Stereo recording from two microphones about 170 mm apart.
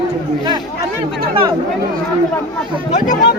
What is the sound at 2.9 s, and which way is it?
Speech, 50° left (ahead or behind).